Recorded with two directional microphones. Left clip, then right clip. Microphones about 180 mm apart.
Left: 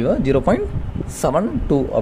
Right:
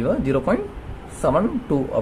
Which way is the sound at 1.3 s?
35° left (ahead or behind).